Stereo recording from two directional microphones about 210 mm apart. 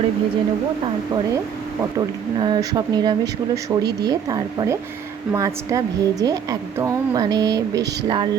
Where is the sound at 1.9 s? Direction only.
20° right (ahead or behind).